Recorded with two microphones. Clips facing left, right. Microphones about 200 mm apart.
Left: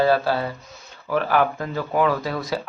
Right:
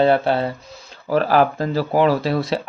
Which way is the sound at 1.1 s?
35° right (ahead or behind).